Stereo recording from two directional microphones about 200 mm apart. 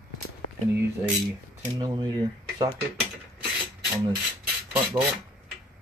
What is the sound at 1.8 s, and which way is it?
Speech, 20° right (ahead or behind).